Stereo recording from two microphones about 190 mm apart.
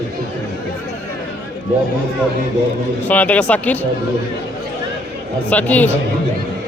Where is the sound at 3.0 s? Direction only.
10° left (ahead or behind).